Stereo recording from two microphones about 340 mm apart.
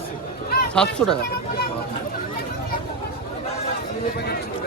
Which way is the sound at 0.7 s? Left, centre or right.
Centre.